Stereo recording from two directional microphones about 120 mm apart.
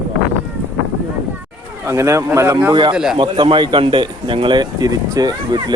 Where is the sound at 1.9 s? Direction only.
25° right (ahead or behind).